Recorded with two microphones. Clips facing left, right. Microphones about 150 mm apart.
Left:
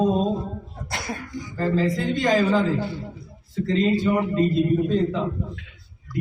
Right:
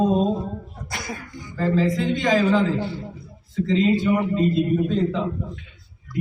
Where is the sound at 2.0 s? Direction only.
5° left (ahead or behind).